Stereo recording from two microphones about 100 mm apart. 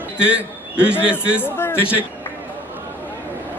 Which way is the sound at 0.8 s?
10° right (ahead or behind).